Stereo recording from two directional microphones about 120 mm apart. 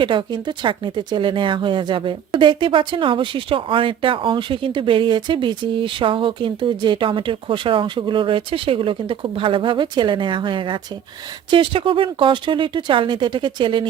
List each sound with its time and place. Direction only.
0.0 s speech: 40° right (ahead or behind)